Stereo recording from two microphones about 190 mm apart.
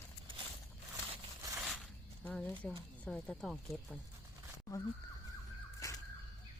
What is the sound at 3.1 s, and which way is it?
Speech, 5° left (ahead or behind).